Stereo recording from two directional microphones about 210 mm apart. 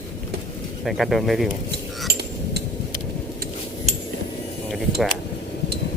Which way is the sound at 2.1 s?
50° right (ahead or behind).